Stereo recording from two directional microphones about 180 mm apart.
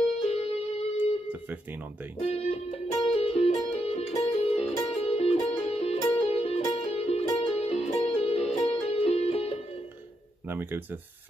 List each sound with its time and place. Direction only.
0.2 s music: 35° left (ahead or behind)
2.1 s speech: 35° left (ahead or behind)
3.0 s music: 35° left (ahead or behind)
10.5 s speech: 10° right (ahead or behind)